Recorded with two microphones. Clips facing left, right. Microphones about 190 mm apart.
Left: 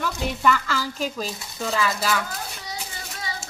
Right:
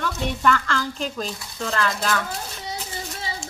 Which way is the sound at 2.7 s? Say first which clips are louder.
Right 3 dB; 30° right (ahead or behind).